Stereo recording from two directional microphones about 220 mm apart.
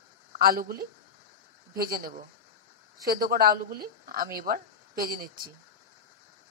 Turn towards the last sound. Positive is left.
turn(degrees=-40)  # may be behind; listen again after turning